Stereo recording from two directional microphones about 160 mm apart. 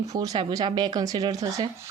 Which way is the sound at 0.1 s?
20° right (ahead or behind).